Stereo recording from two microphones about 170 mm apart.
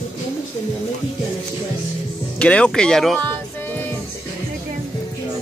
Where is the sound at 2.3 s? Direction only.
5° left (ahead or behind).